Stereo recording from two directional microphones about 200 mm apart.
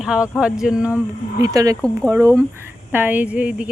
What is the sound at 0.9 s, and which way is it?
Speech, 15° right (ahead or behind).